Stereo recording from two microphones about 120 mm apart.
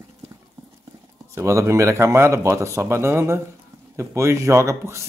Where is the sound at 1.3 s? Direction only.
25° right (ahead or behind).